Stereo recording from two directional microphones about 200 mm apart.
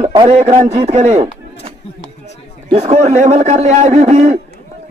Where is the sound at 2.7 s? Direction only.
30° right (ahead or behind).